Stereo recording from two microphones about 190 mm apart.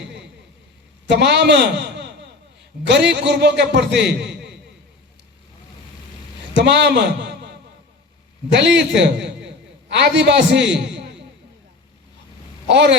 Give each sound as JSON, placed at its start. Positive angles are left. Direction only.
{"t": 0.0, "sound": "a sound", "side_deg": -65}
{"t": 1.1, "sound": "a man's voice", "side_deg": -60}
{"t": 6.6, "sound": "a man's voice", "side_deg": -65}
{"t": 12.6, "sound": "a man's voice", "side_deg": -65}